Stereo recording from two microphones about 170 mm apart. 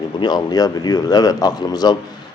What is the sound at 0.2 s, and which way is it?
Speech, 25° left (ahead or behind).